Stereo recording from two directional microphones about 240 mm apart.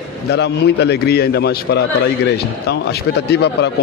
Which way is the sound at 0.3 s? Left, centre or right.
Left.